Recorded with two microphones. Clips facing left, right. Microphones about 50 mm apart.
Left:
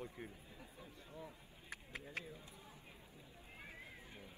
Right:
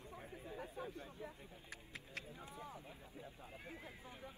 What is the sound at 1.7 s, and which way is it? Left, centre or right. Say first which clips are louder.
Clip-clop: left 5 dB; centre.